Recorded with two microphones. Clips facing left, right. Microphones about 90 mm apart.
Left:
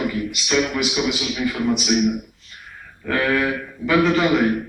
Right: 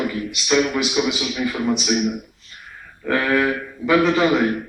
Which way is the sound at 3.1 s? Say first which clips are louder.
Right 1 dB; 10° right (ahead or behind).